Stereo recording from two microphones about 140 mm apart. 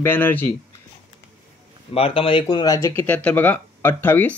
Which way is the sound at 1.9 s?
40° left (ahead or behind).